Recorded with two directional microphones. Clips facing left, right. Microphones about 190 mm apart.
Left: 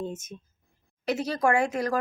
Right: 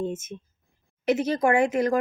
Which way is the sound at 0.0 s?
25° right (ahead or behind).